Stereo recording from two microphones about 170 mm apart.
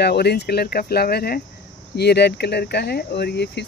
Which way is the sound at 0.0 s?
70° left (ahead or behind).